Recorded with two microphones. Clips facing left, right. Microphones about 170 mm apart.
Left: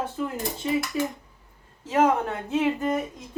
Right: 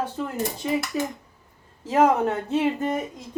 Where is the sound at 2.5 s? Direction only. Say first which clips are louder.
Right 1 dB; 35° right (ahead or behind).